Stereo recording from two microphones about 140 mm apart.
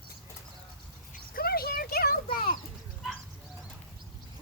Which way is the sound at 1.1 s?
90° left.